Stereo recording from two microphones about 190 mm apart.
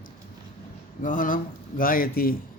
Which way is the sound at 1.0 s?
45° left (ahead or behind).